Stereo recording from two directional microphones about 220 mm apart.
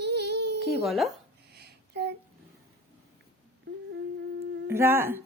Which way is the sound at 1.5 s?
50° right (ahead or behind).